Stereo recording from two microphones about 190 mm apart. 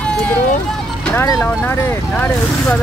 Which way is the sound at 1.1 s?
15° left (ahead or behind).